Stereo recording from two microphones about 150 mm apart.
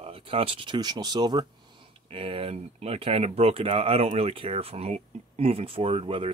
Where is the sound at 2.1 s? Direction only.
40° right (ahead or behind).